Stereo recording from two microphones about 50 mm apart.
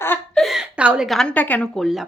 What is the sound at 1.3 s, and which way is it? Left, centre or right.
Female singing, left.